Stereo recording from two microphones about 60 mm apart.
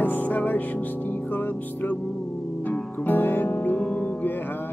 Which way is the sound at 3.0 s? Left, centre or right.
Left.